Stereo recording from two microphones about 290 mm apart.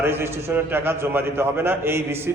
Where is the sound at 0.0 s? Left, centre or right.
Centre.